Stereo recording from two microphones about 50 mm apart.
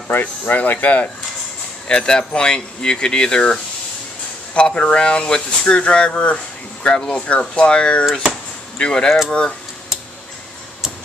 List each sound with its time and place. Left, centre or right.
0.2 s speech: left
1.9 s speech: centre
4.6 s speech: left
8.0 s speech: centre
8.7 s speech: centre